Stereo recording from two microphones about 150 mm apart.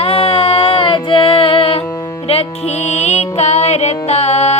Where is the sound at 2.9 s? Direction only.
45° left (ahead or behind).